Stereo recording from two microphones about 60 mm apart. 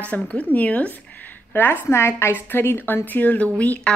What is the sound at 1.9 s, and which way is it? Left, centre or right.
A woman's voice, left.